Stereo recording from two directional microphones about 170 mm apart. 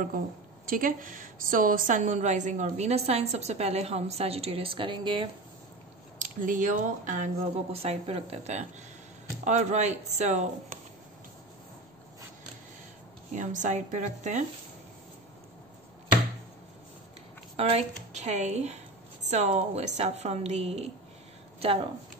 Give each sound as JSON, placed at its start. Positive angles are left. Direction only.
{"t": 0.7, "sound": "a woman's voice", "side_deg": -55}
{"t": 6.1, "sound": "a woman's voice", "side_deg": -50}
{"t": 13.3, "sound": "speech", "side_deg": -45}
{"t": 17.6, "sound": "a woman's voice", "side_deg": -35}